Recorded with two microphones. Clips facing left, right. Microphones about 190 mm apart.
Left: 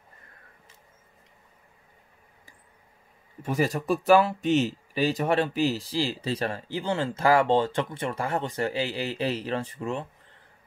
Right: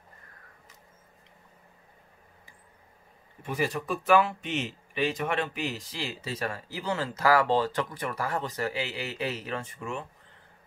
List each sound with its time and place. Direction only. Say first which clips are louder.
3.4 s speech: left 5 dB; 40° left (ahead or behind)